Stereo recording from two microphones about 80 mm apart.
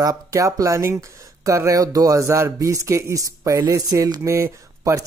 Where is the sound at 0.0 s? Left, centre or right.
Right.